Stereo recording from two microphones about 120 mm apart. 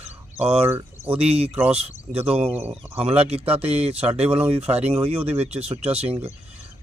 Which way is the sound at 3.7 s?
55° right (ahead or behind).